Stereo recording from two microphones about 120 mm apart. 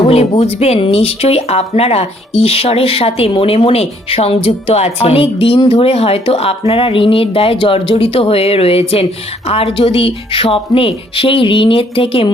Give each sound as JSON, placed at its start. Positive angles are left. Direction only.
{"t": 0.0, "sound": "speech", "side_deg": 60}